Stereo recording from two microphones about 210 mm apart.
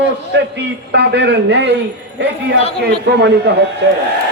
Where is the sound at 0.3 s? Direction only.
55° right (ahead or behind).